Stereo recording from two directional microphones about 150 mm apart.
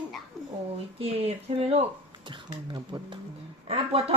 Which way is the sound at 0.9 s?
40° right (ahead or behind).